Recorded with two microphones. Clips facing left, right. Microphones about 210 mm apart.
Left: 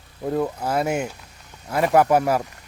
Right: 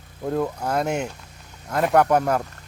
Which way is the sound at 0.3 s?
5° left (ahead or behind).